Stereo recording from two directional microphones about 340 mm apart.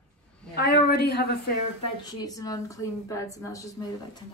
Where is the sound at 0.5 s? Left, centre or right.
Left.